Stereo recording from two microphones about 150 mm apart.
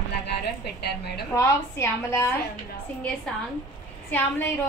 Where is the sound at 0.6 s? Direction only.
90° left.